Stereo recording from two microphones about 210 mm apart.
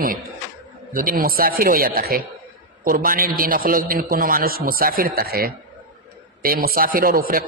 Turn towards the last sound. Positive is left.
turn(degrees=-45)  # may be behind; listen again after turning